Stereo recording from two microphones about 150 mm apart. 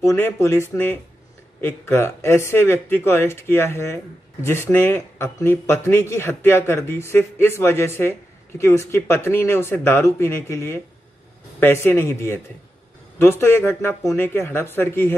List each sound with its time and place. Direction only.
0.0 s speech: 20° left (ahead or behind)